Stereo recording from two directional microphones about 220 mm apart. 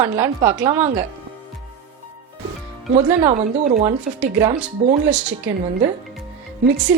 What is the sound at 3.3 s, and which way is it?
Speech, 30° right (ahead or behind).